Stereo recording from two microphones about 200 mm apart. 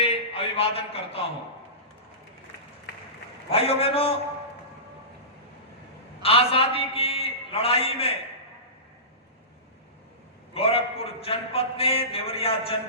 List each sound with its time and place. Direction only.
0.0 s a sound: 30° left (ahead or behind)
3.5 s a man's voice: 30° left (ahead or behind)
6.2 s a man's voice: 30° left (ahead or behind)
10.5 s a man's voice: 30° left (ahead or behind)